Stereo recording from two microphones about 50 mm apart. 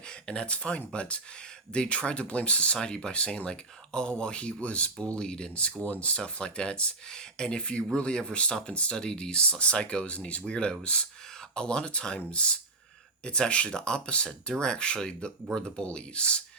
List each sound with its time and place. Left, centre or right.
0.1 s speech: centre